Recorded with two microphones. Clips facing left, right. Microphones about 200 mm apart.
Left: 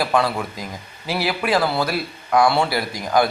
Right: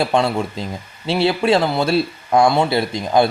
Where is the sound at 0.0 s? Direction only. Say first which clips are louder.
Right 3 dB; 25° right (ahead or behind).